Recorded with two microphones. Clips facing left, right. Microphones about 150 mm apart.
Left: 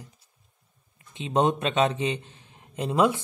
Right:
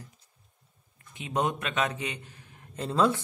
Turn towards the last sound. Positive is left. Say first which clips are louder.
# left 3 dB
turn(degrees=15)  # may be behind; listen again after turning